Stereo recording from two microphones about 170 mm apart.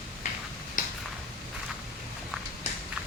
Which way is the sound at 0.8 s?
50° left (ahead or behind).